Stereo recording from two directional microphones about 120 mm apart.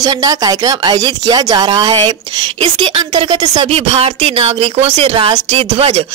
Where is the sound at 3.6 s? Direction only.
55° right (ahead or behind).